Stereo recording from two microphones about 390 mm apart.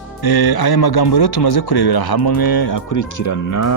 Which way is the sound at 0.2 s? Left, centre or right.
Left.